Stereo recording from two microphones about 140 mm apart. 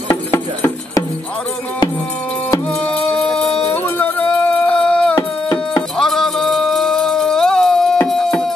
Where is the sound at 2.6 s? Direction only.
10° left (ahead or behind).